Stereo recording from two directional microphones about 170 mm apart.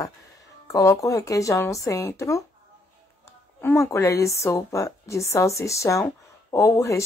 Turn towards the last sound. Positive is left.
turn(degrees=15)  # may be behind; listen again after turning